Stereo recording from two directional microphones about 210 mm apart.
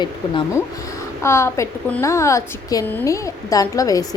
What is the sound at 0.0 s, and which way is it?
A woman's voice, 20° left (ahead or behind).